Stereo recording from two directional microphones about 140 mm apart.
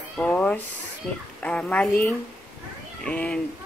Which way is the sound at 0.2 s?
10° left (ahead or behind).